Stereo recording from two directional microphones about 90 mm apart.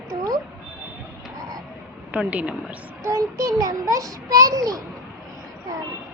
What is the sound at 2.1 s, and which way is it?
Speech, 15° right (ahead or behind).